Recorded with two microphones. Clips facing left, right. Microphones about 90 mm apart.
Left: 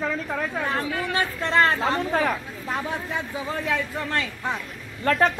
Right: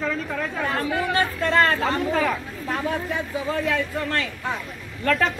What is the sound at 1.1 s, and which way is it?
Speech, 20° left (ahead or behind).